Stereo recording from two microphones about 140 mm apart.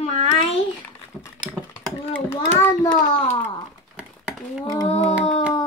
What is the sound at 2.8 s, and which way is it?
Speech, 30° left (ahead or behind).